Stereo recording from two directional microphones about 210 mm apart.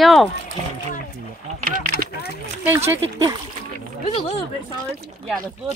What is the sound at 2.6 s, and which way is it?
Speech, 10° right (ahead or behind).